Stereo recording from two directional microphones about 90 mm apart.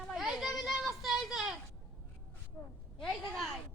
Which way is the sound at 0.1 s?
5° right (ahead or behind).